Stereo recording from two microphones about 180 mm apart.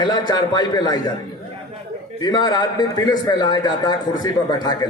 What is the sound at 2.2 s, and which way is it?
A man's voice, 25° left (ahead or behind).